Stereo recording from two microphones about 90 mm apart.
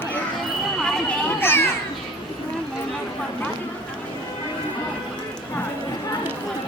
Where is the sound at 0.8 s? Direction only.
10° left (ahead or behind).